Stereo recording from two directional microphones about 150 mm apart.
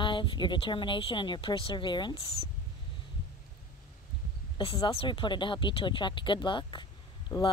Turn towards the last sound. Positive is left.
turn(degrees=30)  # may be behind; listen again after turning